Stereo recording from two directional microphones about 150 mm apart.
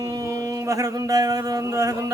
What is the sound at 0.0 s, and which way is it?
A man's voice, 20° right (ahead or behind).